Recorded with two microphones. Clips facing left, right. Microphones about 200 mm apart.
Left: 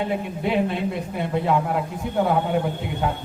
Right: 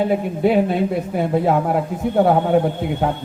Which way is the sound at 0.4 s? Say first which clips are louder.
Right 6 dB; 45° right (ahead or behind).